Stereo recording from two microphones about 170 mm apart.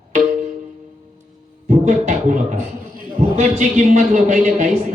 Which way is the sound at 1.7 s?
45° right (ahead or behind).